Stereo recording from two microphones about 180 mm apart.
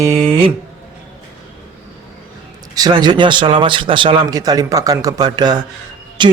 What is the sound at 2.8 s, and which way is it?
A man's voice, 25° right (ahead or behind).